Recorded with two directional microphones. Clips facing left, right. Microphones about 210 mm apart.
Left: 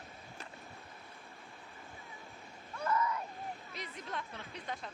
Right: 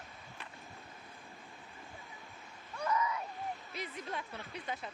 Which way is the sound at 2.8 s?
15° right (ahead or behind).